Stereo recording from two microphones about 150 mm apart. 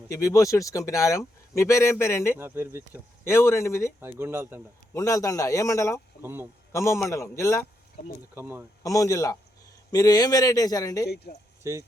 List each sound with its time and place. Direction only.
0.1 s speech: 20° left (ahead or behind)
2.4 s speech: 15° right (ahead or behind)
3.2 s speech: 15° left (ahead or behind)
4.0 s speech: 15° right (ahead or behind)
4.9 s speech: 20° left (ahead or behind)
6.2 s speech: 15° right (ahead or behind)
6.7 s speech: 20° left (ahead or behind)
8.4 s speech: 15° right (ahead or behind)
8.8 s speech: 20° left (ahead or behind)
11.0 s speech: 90° left
11.6 s speech: 20° right (ahead or behind)